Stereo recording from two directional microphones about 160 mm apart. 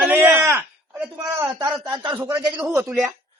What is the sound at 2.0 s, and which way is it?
Speech, 25° right (ahead or behind).